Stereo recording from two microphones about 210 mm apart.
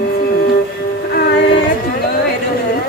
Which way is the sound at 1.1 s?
50° left (ahead or behind).